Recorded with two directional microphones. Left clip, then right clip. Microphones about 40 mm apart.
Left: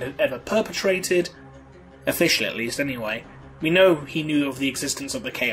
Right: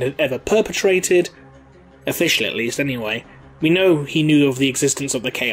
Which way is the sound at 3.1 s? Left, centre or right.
Left.